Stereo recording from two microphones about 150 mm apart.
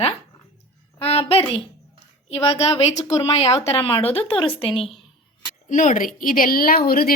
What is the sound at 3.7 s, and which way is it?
Speech, 35° left (ahead or behind).